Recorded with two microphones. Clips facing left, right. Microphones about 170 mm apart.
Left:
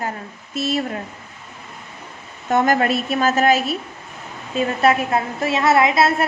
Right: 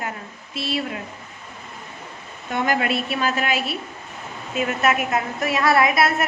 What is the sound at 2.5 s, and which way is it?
A woman's voice, 45° left (ahead or behind).